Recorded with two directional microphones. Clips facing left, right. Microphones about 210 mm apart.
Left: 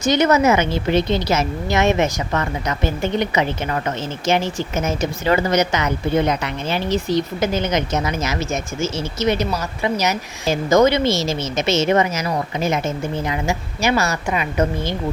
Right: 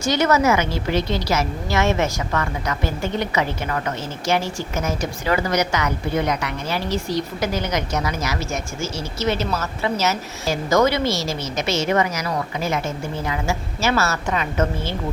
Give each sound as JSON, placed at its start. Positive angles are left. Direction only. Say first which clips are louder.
{"t": 0.0, "sound": "a woman's voice", "louder": "left 3 dB", "side_deg": 20}